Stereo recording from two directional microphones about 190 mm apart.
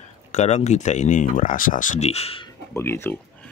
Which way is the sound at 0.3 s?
35° left (ahead or behind).